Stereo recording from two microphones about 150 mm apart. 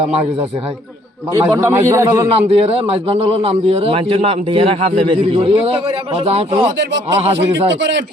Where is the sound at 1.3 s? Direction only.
20° right (ahead or behind).